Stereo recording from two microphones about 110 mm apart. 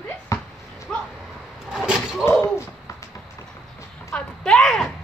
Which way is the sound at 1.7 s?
5° right (ahead or behind).